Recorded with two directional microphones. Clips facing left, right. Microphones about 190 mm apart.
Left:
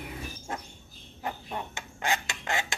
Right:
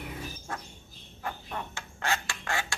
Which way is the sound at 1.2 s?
20° left (ahead or behind).